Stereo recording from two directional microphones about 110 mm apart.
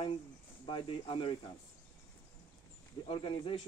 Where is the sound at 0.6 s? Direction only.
50° left (ahead or behind).